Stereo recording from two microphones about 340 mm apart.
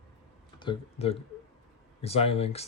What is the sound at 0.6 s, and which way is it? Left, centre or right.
Speech, centre.